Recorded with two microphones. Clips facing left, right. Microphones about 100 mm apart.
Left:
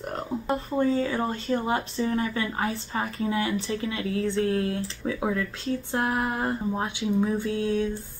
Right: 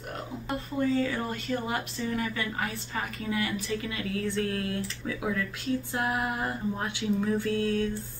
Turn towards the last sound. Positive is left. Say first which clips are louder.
# left 2 dB
turn(degrees=20)  # may be behind; listen again after turning